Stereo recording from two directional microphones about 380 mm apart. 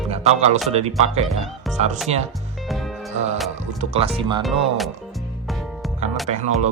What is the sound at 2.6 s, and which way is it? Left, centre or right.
Music, centre.